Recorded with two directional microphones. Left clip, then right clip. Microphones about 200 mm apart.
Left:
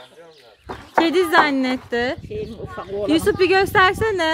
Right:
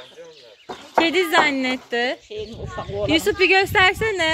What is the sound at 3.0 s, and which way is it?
Speech, 25° left (ahead or behind).